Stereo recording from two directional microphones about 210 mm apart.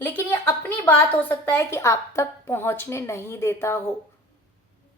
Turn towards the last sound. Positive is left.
turn(degrees=10)  # may be behind; listen again after turning